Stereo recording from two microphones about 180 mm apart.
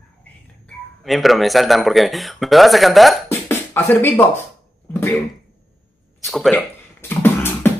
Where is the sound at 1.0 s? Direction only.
Centre (ahead or behind).